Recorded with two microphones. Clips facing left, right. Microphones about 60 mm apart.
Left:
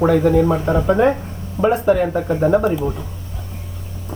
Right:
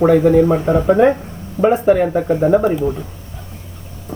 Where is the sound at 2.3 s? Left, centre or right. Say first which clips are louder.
Right 2 dB; centre.